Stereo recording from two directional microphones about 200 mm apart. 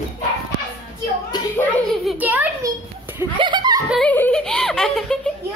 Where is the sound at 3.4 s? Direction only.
25° right (ahead or behind).